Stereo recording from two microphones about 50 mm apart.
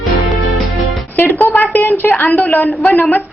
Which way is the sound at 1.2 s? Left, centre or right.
Left.